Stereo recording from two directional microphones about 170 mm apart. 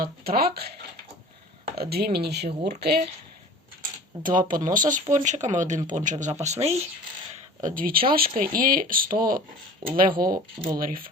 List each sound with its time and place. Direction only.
0.0 s speech: 60° right (ahead or behind)
4.2 s speech: 50° right (ahead or behind)
7.6 s speech: 55° right (ahead or behind)